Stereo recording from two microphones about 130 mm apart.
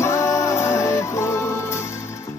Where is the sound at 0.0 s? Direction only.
20° left (ahead or behind).